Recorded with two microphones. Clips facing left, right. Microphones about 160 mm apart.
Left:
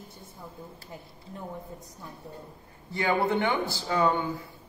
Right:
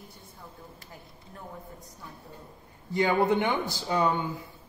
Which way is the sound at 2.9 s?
15° right (ahead or behind).